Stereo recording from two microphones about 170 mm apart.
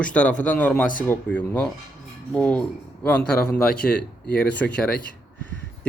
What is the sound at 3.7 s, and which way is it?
Speech, 65° left (ahead or behind).